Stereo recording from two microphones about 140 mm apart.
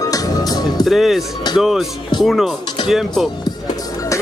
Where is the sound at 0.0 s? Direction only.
25° left (ahead or behind).